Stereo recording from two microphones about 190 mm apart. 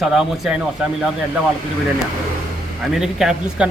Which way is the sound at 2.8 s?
Centre (ahead or behind).